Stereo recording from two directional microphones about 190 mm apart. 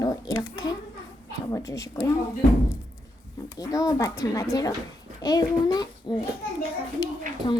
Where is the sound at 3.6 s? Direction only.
20° left (ahead or behind).